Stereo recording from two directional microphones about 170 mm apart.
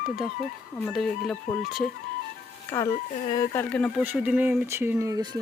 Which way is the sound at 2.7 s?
20° left (ahead or behind).